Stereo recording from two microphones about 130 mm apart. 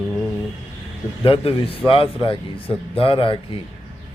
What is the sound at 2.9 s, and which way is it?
Speech, 45° left (ahead or behind).